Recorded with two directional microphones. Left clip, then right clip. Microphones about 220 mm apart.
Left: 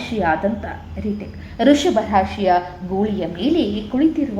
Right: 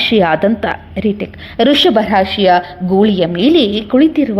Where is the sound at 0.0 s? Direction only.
45° right (ahead or behind).